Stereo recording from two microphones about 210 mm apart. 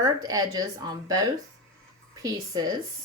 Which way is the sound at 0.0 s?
15° right (ahead or behind).